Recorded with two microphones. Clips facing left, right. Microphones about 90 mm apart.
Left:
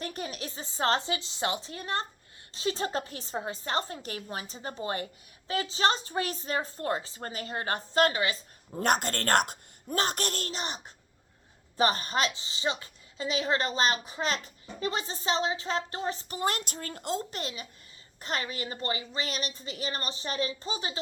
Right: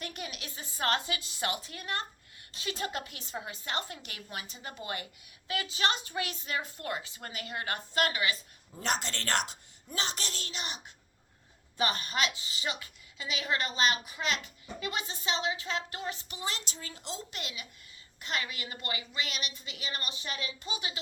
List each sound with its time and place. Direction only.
0.0 s a woman's voice: 35° left (ahead or behind)
8.8 s a woman's voice: 50° left (ahead or behind); by 16.4 s 35° left (ahead or behind)
16.4 s a woman's voice: 50° left (ahead or behind); by 21.0 s 35° left (ahead or behind)